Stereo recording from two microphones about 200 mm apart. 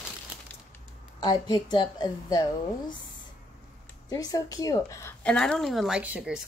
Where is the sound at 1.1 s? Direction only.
20° left (ahead or behind).